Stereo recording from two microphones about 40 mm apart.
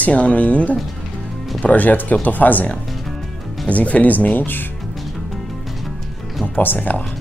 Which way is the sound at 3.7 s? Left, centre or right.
Left.